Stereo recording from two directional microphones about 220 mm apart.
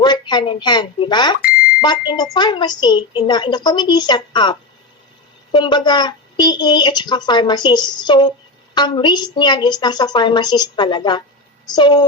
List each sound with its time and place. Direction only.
0.0 s a woman's voice: 20° left (ahead or behind)